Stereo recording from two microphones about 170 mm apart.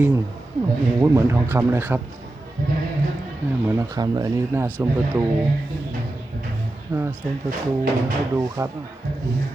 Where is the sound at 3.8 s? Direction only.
20° right (ahead or behind).